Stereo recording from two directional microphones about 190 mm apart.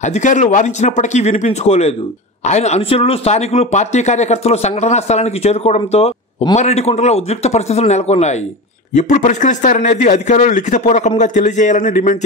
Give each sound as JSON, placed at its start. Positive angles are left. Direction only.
{"t": 0.0, "sound": "speech", "side_deg": 40}